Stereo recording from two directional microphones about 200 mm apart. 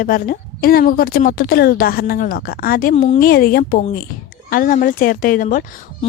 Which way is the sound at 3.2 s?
50° left (ahead or behind).